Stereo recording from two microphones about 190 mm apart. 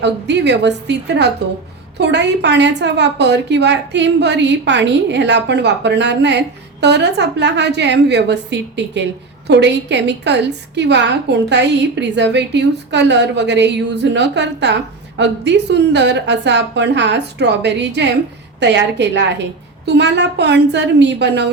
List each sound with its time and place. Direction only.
0.0 s a woman's voice: 65° right (ahead or behind)